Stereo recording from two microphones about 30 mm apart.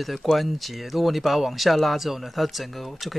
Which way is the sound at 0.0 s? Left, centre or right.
Centre.